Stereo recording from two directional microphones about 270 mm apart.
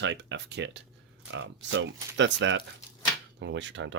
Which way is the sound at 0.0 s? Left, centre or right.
Right.